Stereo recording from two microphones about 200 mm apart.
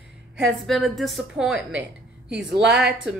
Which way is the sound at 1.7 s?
65° right (ahead or behind).